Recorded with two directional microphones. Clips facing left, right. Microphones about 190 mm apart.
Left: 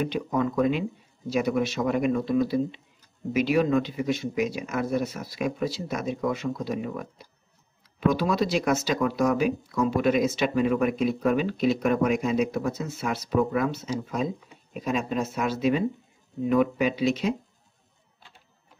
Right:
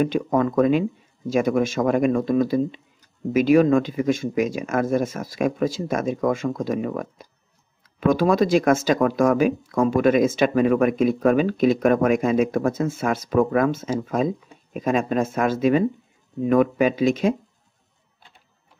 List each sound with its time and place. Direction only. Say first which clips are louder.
0.0 s speech: right 6 dB; 50° right (ahead or behind)